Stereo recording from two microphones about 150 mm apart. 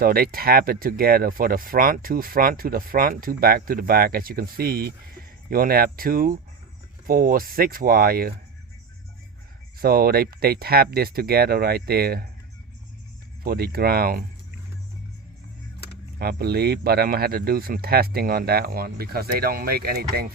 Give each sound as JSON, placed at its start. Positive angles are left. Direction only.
{"t": 0.0, "sound": "speech", "side_deg": -80}
{"t": 9.7, "sound": "speech", "side_deg": -80}
{"t": 13.4, "sound": "speech", "side_deg": -85}
{"t": 16.1, "sound": "speech", "side_deg": -90}